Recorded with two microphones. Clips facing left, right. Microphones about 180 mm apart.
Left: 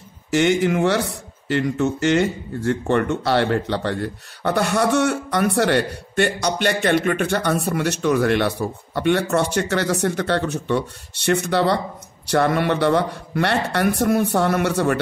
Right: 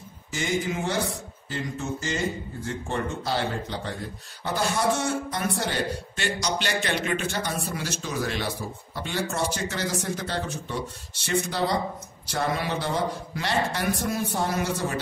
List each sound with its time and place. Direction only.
0.3 s speech: 70° left (ahead or behind)